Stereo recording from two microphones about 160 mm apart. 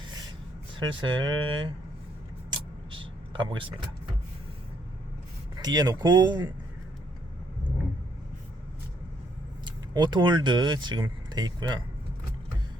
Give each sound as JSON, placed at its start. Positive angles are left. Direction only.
{"t": 0.9, "sound": "speech", "side_deg": -30}
{"t": 2.5, "sound": "vehicle", "side_deg": -30}
{"t": 5.5, "sound": "speech", "side_deg": -25}
{"t": 9.6, "sound": "speech", "side_deg": -30}